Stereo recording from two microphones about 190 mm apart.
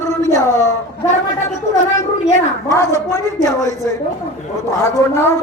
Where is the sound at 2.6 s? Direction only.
15° left (ahead or behind).